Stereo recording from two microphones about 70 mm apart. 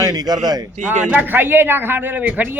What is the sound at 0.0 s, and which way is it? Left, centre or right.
Speech, right.